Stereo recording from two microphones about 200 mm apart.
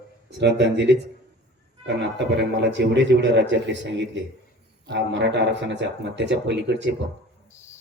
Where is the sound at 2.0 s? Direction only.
60° right (ahead or behind).